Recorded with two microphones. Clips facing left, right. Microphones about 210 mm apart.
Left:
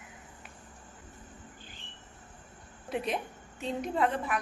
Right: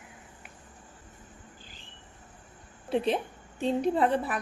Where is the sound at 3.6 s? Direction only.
35° right (ahead or behind).